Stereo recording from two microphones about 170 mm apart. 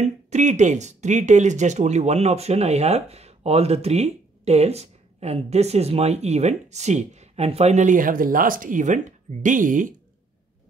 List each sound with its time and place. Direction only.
0.0 s speech: 45° right (ahead or behind)